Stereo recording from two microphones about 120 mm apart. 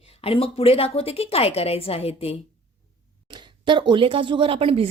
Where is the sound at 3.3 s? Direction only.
40° right (ahead or behind).